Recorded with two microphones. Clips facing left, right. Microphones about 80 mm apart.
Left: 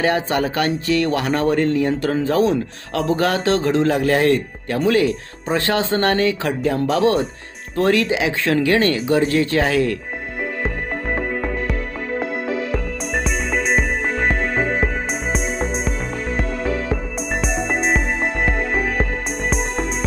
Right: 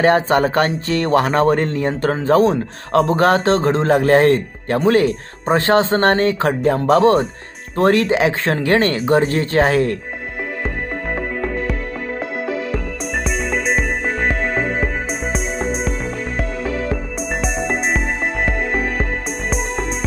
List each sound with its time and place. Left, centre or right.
0.0 s speech: right
11.1 s music: centre